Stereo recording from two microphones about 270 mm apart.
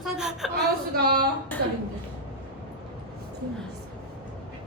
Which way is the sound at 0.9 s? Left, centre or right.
Right.